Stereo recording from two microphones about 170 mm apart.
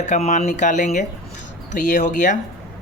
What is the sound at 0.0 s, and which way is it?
Speech, 45° left (ahead or behind).